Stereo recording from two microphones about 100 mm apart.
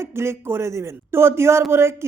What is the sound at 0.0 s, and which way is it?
A woman's voice, 25° right (ahead or behind).